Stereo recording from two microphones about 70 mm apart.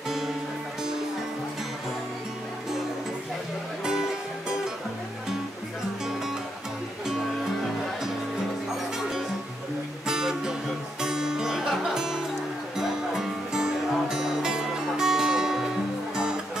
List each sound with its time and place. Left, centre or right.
10.0 s music: centre